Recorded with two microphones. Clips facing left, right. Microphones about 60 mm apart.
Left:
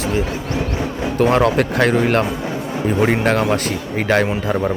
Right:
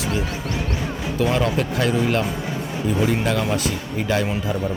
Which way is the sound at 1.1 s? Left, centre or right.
Left.